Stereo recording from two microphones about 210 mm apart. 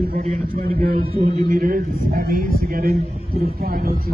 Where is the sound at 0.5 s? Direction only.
45° right (ahead or behind).